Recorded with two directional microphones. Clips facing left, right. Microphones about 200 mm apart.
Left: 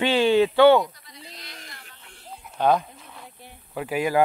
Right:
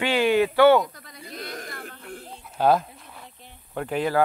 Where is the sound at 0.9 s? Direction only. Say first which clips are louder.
Right 7 dB; 50° right (ahead or behind).